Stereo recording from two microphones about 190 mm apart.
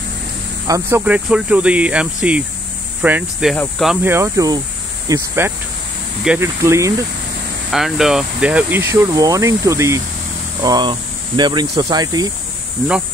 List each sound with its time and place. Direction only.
0.7 s speech: 15° right (ahead or behind)
7.7 s speech: centre (ahead or behind); by 12.3 s 20° right (ahead or behind)